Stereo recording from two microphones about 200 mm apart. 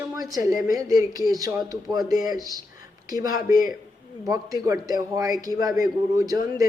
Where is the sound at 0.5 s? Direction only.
15° right (ahead or behind).